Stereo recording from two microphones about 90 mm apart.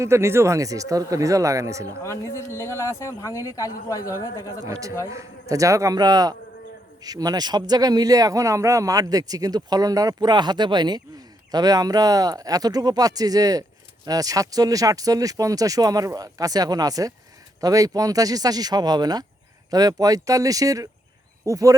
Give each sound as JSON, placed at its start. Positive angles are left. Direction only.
{"t": 0.0, "sound": "speech", "side_deg": -30}
{"t": 2.0, "sound": "a man's voice", "side_deg": 30}
{"t": 4.6, "sound": "speech", "side_deg": -35}